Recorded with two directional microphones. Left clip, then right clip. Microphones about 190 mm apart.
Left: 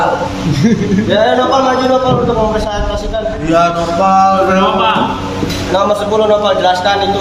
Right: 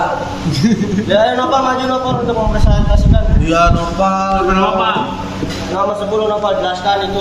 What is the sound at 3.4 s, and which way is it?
Speech, 40° right (ahead or behind).